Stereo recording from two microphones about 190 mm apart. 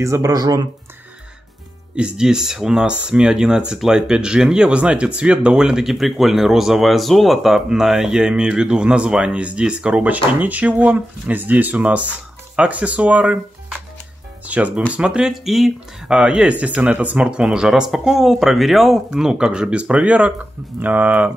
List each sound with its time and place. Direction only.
0.0 s speech: 15° right (ahead or behind)
2.0 s speech: 5° right (ahead or behind)
14.4 s music: 10° right (ahead or behind)
14.9 s speech: 5° right (ahead or behind)